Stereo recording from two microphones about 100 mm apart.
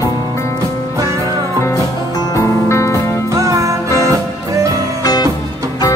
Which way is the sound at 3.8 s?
30° left (ahead or behind).